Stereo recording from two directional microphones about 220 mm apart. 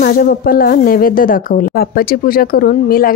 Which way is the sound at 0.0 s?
40° left (ahead or behind).